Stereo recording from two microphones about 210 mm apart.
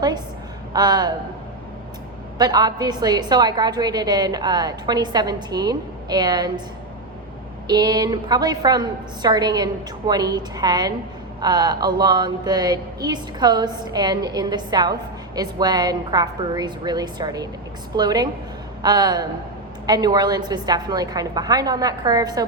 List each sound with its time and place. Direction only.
0.7 s a woman's voice: 20° right (ahead or behind)
2.4 s a woman's voice: 20° right (ahead or behind)
7.7 s a woman's voice: 20° right (ahead or behind)